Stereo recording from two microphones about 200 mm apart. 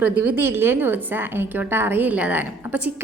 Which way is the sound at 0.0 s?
10° right (ahead or behind).